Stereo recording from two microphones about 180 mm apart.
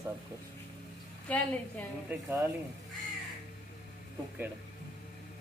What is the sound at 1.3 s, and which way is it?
Speech, 10° left (ahead or behind).